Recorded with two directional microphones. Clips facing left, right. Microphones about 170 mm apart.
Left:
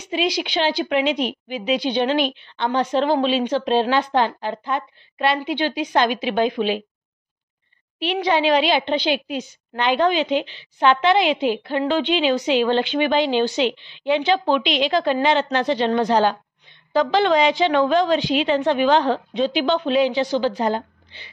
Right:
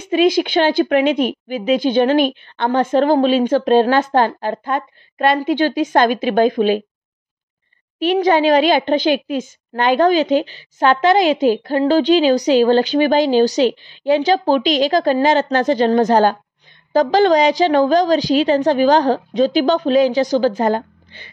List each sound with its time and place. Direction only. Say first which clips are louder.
0.0 s a woman's voice: right 8 dB; 50° right (ahead or behind)
8.0 s a woman's voice: right 6 dB; 45° right (ahead or behind)